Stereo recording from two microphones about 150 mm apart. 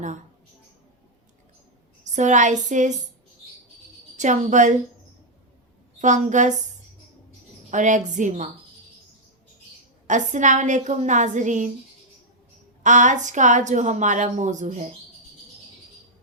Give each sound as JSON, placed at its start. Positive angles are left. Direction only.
{"t": 2.0, "sound": "speech", "side_deg": -55}
{"t": 4.2, "sound": "a woman's voice", "side_deg": -55}
{"t": 6.0, "sound": "a woman's voice", "side_deg": -55}
{"t": 7.7, "sound": "a woman's voice", "side_deg": -55}
{"t": 10.1, "sound": "a woman's voice", "side_deg": -55}
{"t": 12.8, "sound": "a woman's voice", "side_deg": -55}